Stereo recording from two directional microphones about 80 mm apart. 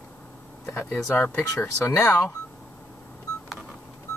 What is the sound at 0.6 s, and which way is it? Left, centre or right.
Speech, left.